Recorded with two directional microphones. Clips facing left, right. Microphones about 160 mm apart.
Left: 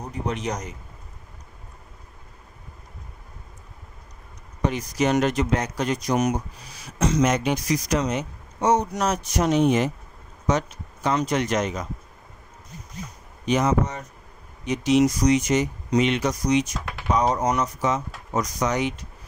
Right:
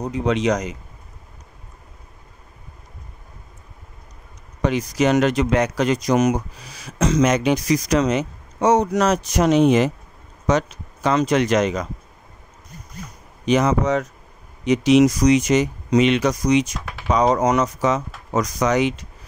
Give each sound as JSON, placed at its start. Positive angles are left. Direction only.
{"t": 0.0, "sound": "speech", "side_deg": -90}
{"t": 4.6, "sound": "speech", "side_deg": -90}
{"t": 13.5, "sound": "speech", "side_deg": -90}